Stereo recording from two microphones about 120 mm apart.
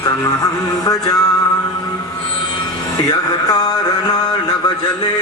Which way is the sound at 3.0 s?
35° left (ahead or behind).